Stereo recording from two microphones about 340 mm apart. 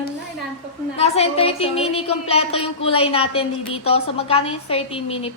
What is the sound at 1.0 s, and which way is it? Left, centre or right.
A woman's voice, centre.